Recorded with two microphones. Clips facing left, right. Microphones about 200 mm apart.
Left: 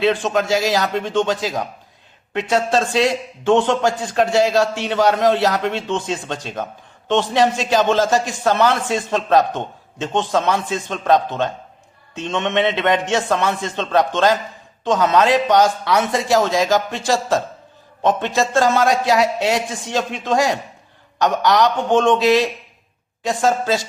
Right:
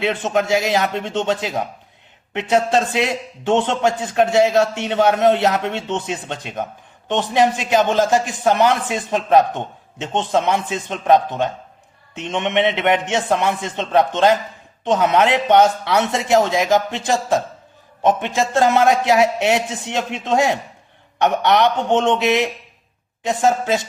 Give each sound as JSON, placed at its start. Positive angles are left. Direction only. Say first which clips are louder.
{"t": 0.0, "sound": "a man's voice", "louder": "left 2 dB", "side_deg": -20}